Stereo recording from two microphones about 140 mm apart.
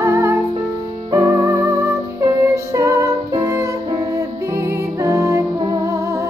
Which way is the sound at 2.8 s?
20° right (ahead or behind).